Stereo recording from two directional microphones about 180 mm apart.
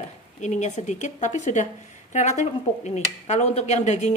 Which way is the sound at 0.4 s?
40° left (ahead or behind).